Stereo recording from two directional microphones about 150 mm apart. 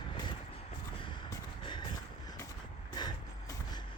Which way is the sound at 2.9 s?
25° left (ahead or behind).